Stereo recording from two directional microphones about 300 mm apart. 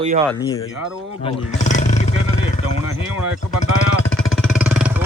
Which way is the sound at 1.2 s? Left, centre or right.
Left.